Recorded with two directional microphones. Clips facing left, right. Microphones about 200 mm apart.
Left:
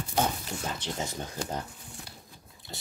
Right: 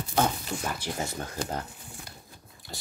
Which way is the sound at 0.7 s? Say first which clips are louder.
Right 1 dB; 20° left (ahead or behind).